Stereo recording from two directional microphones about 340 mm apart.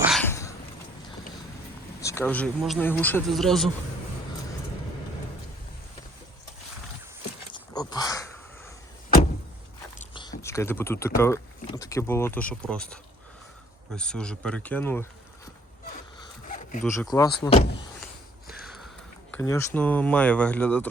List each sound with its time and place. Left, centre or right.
0.0 s a sound: centre
2.0 s speech: centre
7.5 s dog: centre
10.0 s speech: centre
16.2 s zipper: left
17.0 s speech: centre
19.3 s speech: centre